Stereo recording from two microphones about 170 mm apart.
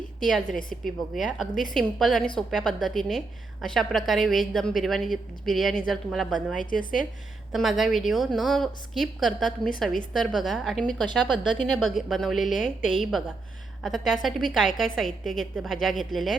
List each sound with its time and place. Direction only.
0.9 s a woman's voice: centre (ahead or behind)
6.6 s a woman's voice: 55° left (ahead or behind)
7.5 s a woman's voice: centre (ahead or behind)